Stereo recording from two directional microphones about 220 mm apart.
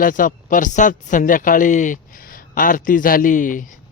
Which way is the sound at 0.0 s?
40° left (ahead or behind).